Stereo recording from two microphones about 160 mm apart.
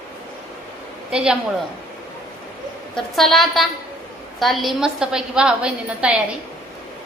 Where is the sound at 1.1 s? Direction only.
5° right (ahead or behind).